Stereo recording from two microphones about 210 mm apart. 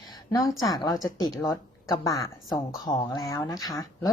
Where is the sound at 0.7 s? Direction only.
15° left (ahead or behind).